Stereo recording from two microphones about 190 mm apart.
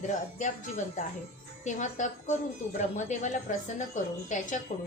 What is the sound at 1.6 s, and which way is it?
Speech, 40° left (ahead or behind).